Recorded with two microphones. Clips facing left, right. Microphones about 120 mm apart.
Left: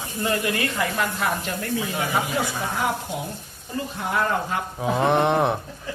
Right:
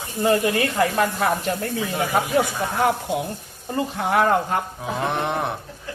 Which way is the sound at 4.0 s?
70° right (ahead or behind).